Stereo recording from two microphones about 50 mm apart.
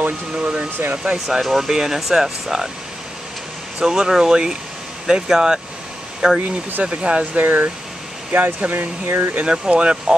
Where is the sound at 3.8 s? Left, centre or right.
Centre.